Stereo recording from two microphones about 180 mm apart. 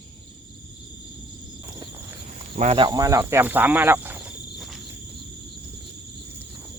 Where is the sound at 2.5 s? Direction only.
35° right (ahead or behind).